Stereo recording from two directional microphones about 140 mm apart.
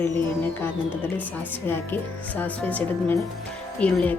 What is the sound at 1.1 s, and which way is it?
Speech, 15° left (ahead or behind).